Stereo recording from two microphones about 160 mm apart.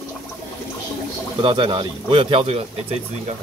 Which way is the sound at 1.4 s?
30° right (ahead or behind).